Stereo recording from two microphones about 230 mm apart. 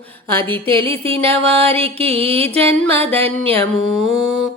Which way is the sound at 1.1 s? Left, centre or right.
Right.